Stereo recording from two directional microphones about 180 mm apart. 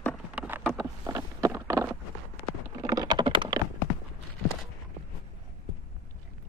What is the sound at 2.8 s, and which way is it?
Typing, 20° right (ahead or behind).